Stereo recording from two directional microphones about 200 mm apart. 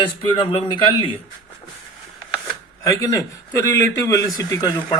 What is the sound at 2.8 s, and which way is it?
A man's voice, 15° left (ahead or behind).